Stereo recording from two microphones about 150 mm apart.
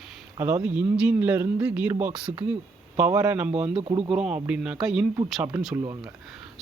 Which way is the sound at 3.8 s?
35° right (ahead or behind).